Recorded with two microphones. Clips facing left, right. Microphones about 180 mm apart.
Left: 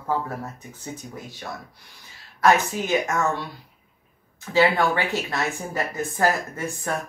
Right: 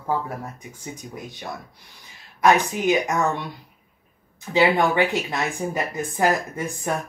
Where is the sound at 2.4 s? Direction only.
15° right (ahead or behind).